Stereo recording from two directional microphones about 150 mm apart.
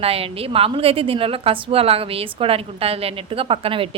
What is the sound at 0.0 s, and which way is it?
A woman's voice, 40° right (ahead or behind).